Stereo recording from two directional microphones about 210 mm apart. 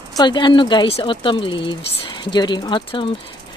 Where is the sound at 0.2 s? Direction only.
20° left (ahead or behind).